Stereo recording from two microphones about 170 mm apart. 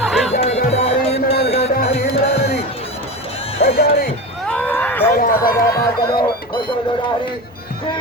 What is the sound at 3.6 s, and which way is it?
Music, 65° left (ahead or behind).